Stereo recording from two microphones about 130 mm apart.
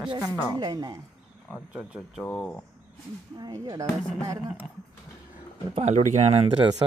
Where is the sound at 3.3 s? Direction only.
30° right (ahead or behind).